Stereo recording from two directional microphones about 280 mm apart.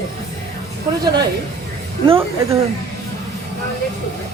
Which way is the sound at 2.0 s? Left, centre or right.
Centre.